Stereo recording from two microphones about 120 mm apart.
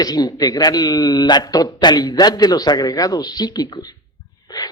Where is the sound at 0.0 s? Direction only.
35° left (ahead or behind).